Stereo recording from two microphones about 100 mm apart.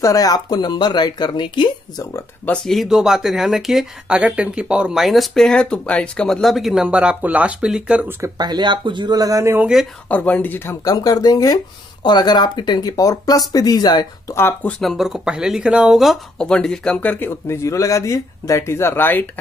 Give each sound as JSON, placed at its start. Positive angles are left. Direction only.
{"t": 0.0, "sound": "speech", "side_deg": 35}
{"t": 2.4, "sound": "speech", "side_deg": 5}
{"t": 8.4, "sound": "speech", "side_deg": -45}
{"t": 10.0, "sound": "speech", "side_deg": 15}
{"t": 10.8, "sound": "speech", "side_deg": 40}
{"t": 14.3, "sound": "speech", "side_deg": 20}
{"t": 14.8, "sound": "speech", "side_deg": 0}
{"t": 17.5, "sound": "speech", "side_deg": 30}